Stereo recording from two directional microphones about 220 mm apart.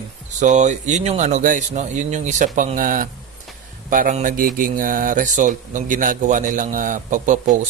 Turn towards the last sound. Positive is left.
turn(degrees=-35)  # may be behind; listen again after turning